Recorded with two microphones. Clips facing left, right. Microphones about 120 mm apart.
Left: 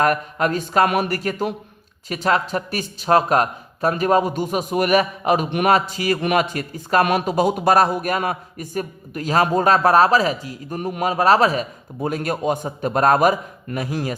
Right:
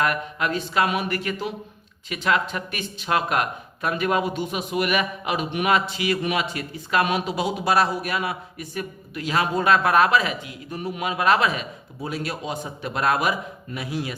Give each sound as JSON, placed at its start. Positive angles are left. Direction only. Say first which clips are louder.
{"t": 0.0, "sound": "speech", "louder": "left 5 dB", "side_deg": 40}
{"t": 11.9, "sound": "speech", "louder": "left 7 dB", "side_deg": 50}